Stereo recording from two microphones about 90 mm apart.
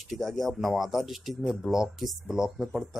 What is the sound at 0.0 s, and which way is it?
A man's voice, centre (ahead or behind).